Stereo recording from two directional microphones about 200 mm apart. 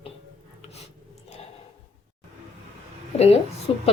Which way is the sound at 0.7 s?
35° left (ahead or behind).